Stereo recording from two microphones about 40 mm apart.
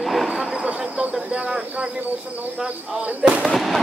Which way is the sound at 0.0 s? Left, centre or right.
Centre.